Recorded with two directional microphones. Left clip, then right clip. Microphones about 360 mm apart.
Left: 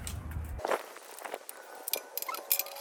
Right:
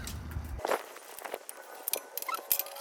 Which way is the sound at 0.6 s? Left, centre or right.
Centre.